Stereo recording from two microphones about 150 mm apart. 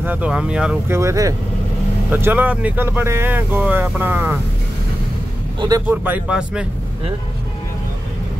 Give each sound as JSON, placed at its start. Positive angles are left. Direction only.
{"t": 0.0, "sound": "speech", "side_deg": -10}
{"t": 0.9, "sound": "speech", "side_deg": -20}
{"t": 5.9, "sound": "speech", "side_deg": -10}